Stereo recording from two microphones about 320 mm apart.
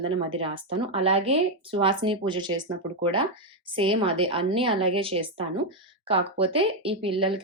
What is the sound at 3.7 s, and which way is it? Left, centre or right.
Speech, centre.